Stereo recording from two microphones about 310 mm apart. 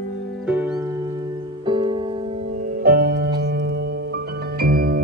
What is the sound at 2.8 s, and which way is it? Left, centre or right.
Music, right.